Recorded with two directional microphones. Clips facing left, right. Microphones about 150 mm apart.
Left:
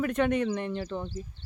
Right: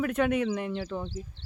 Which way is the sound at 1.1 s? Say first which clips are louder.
Even; 90° right.